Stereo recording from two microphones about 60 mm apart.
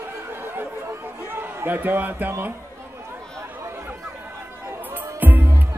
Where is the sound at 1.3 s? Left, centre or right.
Right.